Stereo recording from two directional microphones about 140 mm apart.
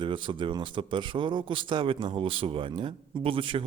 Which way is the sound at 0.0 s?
35° right (ahead or behind).